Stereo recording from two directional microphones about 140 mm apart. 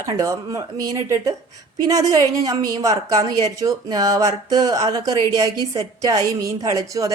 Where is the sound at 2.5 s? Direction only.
25° right (ahead or behind).